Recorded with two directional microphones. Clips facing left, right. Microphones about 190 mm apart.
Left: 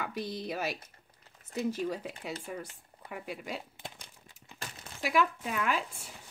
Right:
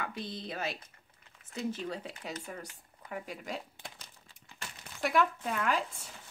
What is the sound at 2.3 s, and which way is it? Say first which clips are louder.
Speech: left 3 dB; 30° left (ahead or behind).